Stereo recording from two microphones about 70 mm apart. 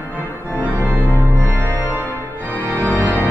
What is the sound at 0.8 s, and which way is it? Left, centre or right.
Music, right.